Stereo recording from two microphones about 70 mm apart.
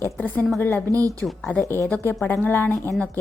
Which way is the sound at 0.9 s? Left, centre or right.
Left.